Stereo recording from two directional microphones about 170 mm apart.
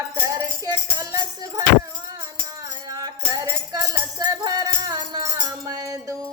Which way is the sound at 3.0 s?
25° right (ahead or behind).